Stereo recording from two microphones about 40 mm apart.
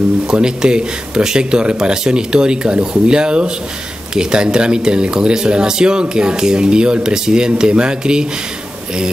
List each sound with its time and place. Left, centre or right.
0.3 s speech: right